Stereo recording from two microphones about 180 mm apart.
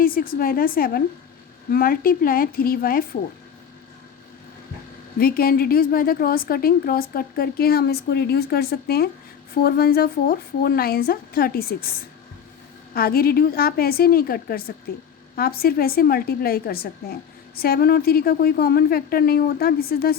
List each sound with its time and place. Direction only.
0.0 s a woman's voice: 55° left (ahead or behind)
5.2 s a woman's voice: 55° left (ahead or behind)
12.9 s a woman's voice: 55° left (ahead or behind)